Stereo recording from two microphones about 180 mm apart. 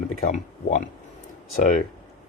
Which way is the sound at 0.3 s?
45° left (ahead or behind).